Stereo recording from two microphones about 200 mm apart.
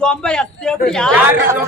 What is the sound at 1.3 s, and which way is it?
Speech, 10° right (ahead or behind).